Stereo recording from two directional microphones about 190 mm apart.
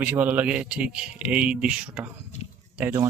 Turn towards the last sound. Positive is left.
turn(degrees=-15)  # may be behind; listen again after turning